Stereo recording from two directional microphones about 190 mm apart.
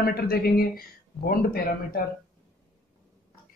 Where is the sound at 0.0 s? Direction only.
55° left (ahead or behind).